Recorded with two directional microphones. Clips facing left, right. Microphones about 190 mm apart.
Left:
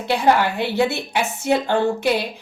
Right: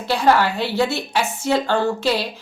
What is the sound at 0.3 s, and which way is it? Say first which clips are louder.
Speech: right 1 dB; 20° left (ahead or behind).